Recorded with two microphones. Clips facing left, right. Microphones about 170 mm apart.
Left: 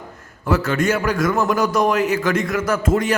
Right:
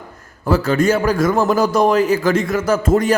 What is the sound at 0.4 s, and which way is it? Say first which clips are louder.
A man's voice: right 3 dB; 35° right (ahead or behind).